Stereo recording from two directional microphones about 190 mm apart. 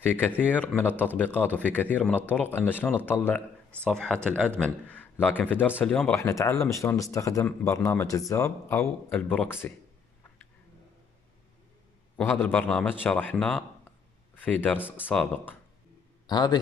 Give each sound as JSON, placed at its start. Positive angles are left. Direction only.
{"t": 0.0, "sound": "a man's voice", "side_deg": 10}
{"t": 12.2, "sound": "a man's voice", "side_deg": 5}
{"t": 16.3, "sound": "a man's voice", "side_deg": 20}